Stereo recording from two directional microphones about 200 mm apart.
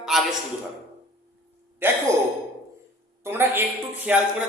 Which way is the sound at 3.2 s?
10° right (ahead or behind).